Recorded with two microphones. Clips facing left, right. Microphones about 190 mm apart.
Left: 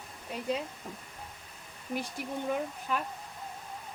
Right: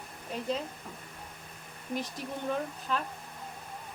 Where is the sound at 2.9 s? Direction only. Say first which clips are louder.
Even; 10° left (ahead or behind).